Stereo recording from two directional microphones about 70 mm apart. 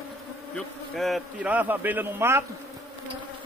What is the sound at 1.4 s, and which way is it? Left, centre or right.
A man's voice, right.